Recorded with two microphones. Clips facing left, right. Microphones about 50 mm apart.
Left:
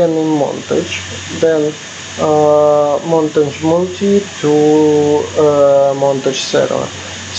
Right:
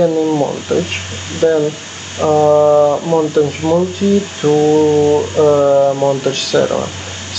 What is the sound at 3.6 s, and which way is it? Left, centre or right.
Speech, left.